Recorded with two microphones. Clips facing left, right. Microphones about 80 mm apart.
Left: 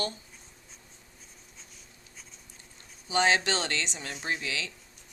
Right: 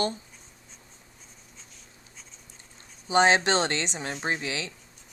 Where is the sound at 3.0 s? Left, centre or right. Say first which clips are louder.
Right 5 dB; right.